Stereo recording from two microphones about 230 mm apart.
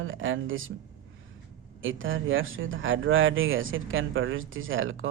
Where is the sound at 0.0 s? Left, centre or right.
Right.